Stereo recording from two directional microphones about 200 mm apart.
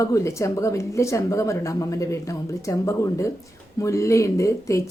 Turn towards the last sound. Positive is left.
turn(degrees=15)  # may be behind; listen again after turning